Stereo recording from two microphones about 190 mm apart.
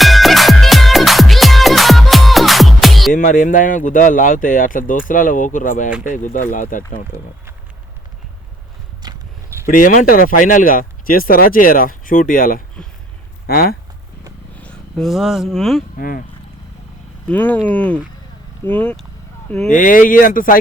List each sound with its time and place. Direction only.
0.0 s music: centre (ahead or behind)
3.1 s speech: 45° left (ahead or behind)
9.0 s a sound: 15° right (ahead or behind)
9.6 s speech: 45° left (ahead or behind)
14.5 s speech: 5° left (ahead or behind)
16.0 s speech: 50° left (ahead or behind)
17.2 s speech: 10° left (ahead or behind)
19.7 s speech: 45° left (ahead or behind)